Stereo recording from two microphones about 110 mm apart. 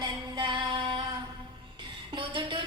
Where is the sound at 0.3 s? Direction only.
45° right (ahead or behind).